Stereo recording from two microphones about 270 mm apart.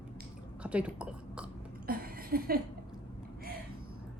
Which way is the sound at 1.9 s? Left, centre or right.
Right.